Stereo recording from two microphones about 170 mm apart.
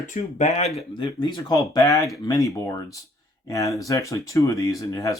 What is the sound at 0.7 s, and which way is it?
Speech, 25° left (ahead or behind).